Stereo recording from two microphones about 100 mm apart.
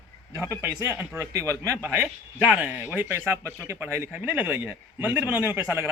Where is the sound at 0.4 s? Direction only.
25° right (ahead or behind).